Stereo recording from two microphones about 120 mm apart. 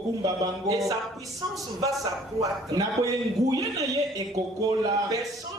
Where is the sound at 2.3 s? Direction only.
30° right (ahead or behind).